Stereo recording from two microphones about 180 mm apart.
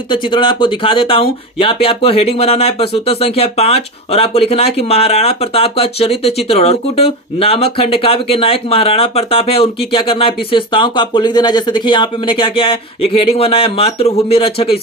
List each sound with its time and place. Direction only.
0.1 s speech: 25° left (ahead or behind)